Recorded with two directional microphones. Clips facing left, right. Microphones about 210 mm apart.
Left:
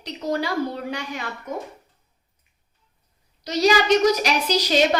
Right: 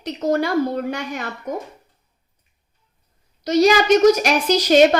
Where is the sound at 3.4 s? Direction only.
50° right (ahead or behind).